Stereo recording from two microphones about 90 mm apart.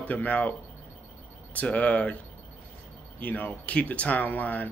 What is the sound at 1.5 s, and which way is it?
Speech, 15° left (ahead or behind).